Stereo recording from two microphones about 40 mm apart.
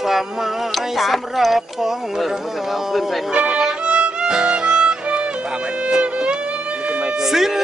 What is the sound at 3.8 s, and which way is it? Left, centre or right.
Violin, right.